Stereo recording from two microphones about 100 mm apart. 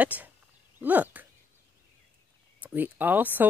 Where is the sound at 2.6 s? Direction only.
20° right (ahead or behind).